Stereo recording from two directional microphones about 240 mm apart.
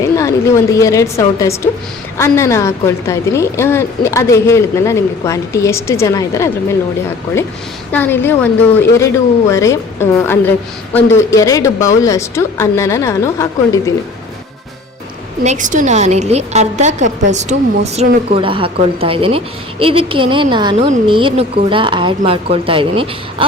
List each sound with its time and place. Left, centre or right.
0.2 s a woman's voice: centre
7.9 s a woman's voice: centre
9.5 s a woman's voice: centre
15.4 s a woman's voice: right